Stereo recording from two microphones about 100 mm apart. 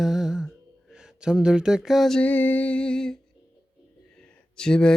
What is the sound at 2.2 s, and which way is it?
Music, 15° left (ahead or behind).